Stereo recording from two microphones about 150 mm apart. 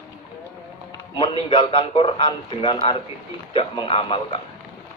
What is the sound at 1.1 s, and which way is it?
A man's voice, 35° left (ahead or behind).